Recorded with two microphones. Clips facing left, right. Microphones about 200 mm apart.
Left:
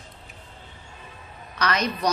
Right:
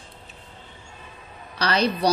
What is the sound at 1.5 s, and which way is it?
Speech, 30° right (ahead or behind).